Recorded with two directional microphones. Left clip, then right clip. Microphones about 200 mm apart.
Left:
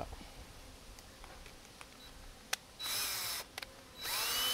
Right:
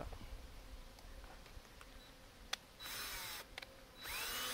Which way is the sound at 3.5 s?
5° left (ahead or behind).